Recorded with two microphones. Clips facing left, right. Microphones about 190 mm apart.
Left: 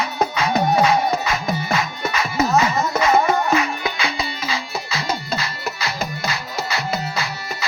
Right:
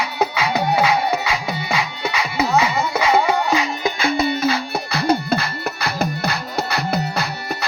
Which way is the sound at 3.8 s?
50° right (ahead or behind).